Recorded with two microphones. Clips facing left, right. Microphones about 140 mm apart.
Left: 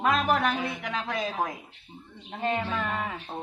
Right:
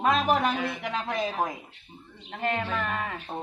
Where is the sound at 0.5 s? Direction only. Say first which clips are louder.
Right 1 dB; 20° left (ahead or behind).